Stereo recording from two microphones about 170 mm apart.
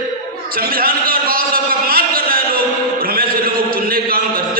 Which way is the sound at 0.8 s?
60° right (ahead or behind).